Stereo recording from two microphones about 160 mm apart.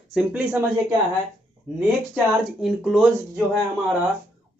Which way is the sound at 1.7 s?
5° right (ahead or behind).